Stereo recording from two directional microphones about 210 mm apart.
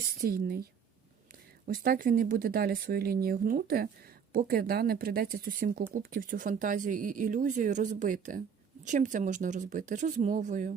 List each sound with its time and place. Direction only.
0.2 s speech: 45° right (ahead or behind)